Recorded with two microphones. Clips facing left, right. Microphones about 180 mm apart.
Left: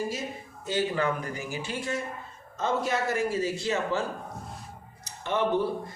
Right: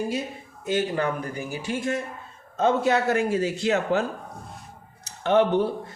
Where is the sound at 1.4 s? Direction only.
55° right (ahead or behind).